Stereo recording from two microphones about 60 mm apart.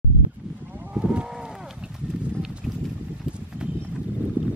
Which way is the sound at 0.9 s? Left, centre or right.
Centre.